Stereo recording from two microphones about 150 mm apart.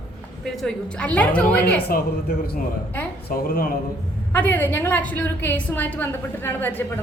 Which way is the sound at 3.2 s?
75° left (ahead or behind).